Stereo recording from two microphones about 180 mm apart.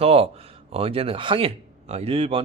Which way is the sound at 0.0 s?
35° right (ahead or behind).